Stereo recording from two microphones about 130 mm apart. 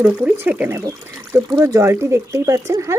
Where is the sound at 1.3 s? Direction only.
30° right (ahead or behind).